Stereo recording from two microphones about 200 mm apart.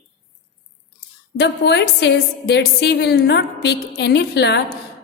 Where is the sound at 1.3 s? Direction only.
60° left (ahead or behind).